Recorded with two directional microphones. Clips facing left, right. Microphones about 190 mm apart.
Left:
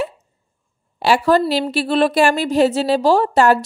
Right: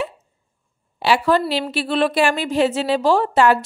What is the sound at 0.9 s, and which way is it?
A woman's voice, 45° left (ahead or behind).